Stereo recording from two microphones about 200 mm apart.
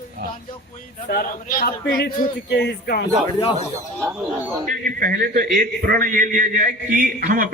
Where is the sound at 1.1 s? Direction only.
45° left (ahead or behind).